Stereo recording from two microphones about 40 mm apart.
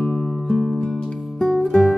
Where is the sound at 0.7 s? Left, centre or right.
Centre.